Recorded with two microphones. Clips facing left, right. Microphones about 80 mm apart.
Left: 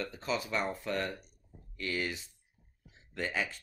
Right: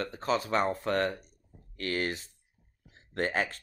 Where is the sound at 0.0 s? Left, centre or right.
Right.